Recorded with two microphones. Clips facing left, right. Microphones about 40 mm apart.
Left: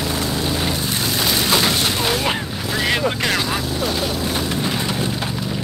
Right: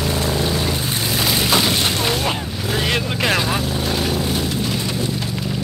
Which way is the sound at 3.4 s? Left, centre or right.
Right.